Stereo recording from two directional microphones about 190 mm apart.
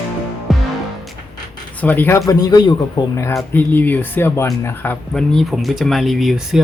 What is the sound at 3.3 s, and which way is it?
Speech, 10° left (ahead or behind).